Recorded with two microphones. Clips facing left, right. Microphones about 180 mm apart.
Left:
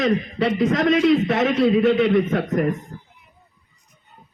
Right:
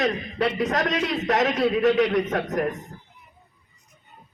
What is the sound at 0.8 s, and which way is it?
Speech, 70° left (ahead or behind).